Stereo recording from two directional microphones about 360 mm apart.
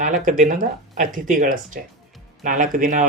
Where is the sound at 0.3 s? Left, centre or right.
Right.